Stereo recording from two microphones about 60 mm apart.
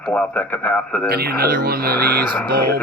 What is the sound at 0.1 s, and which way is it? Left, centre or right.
Speech, left.